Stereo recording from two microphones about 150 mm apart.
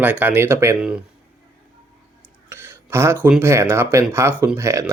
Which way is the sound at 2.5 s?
15° right (ahead or behind).